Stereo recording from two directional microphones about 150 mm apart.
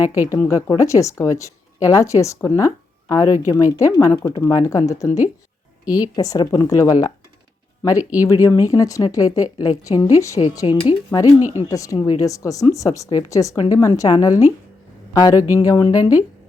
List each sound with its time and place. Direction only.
0.0 s speech: 10° right (ahead or behind)
0.3 s a woman's voice: 20° left (ahead or behind)
8.2 s a woman's voice: 20° left (ahead or behind)